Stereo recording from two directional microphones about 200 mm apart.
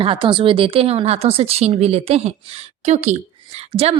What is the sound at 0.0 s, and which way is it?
A woman's voice, 25° right (ahead or behind).